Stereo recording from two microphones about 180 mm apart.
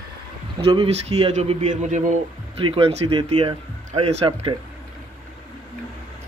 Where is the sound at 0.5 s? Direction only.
30° right (ahead or behind).